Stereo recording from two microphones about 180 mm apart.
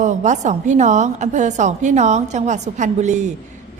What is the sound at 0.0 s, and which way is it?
A woman's voice, 40° right (ahead or behind).